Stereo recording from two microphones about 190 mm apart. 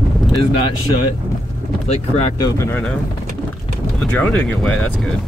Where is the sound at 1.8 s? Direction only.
35° left (ahead or behind).